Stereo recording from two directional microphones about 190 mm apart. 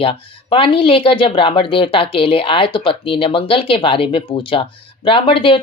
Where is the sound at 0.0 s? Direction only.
30° left (ahead or behind).